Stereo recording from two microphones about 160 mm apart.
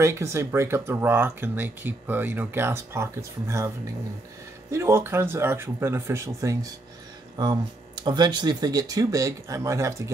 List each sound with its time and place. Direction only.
0.0 s speech: 15° right (ahead or behind)